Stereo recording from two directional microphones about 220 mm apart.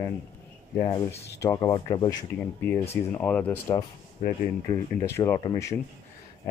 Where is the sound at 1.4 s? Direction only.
15° left (ahead or behind).